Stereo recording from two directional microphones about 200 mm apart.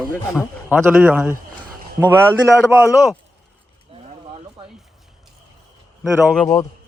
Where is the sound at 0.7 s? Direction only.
5° right (ahead or behind).